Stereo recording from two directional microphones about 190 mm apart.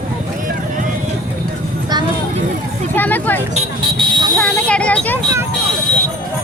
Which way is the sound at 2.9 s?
10° left (ahead or behind).